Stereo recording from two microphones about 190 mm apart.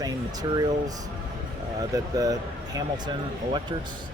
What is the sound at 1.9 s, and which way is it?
Speech, 20° right (ahead or behind).